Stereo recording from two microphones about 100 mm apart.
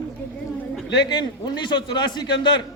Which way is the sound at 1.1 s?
45° left (ahead or behind).